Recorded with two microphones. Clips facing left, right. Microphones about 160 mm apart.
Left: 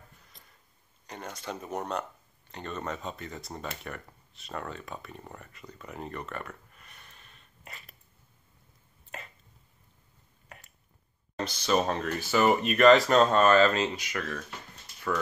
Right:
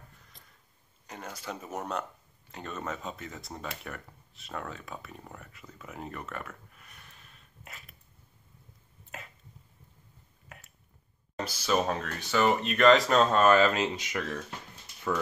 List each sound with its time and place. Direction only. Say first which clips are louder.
1.0 s speech: left 1 dB; 5° right (ahead or behind)
10.5 s a sound: left 1 dB; centre (ahead or behind)
11.3 s speech: left 1 dB; 5° right (ahead or behind)
13.9 s speech: right 1 dB; 20° right (ahead or behind)